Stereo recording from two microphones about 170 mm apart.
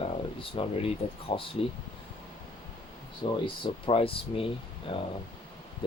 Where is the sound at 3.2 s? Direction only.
35° left (ahead or behind).